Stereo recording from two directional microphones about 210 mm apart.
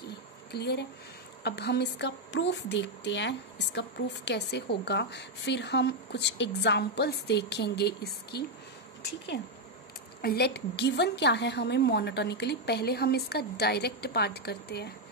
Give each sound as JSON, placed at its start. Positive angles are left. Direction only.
{"t": 0.5, "sound": "speech", "side_deg": 50}
{"t": 10.2, "sound": "speech", "side_deg": 50}